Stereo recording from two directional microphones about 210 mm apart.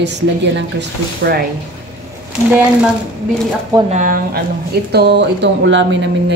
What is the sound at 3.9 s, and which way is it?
Speech, 40° right (ahead or behind).